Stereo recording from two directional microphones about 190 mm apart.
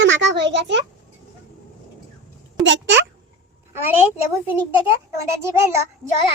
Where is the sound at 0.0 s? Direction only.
70° right (ahead or behind).